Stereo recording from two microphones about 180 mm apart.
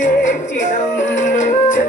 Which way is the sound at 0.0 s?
45° left (ahead or behind).